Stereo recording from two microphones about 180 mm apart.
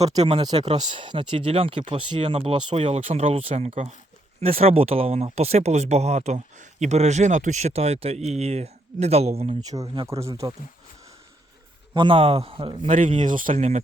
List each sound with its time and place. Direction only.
0.2 s speech: 30° right (ahead or behind)
9.6 s speech: 20° right (ahead or behind)
11.9 s speech: 30° right (ahead or behind)
13.1 s speech: 45° right (ahead or behind)